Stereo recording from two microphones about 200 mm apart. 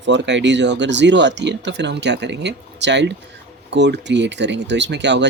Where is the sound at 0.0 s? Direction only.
65° right (ahead or behind).